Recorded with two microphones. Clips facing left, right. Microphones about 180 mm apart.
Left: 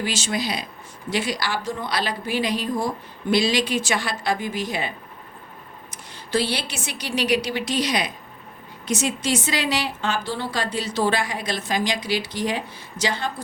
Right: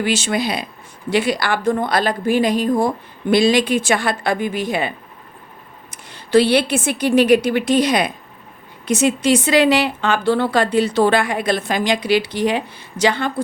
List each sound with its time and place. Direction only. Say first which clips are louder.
0.0 s a woman's voice: right 6 dB; 60° right (ahead or behind)
5.9 s a woman's voice: right 10 dB; 60° right (ahead or behind)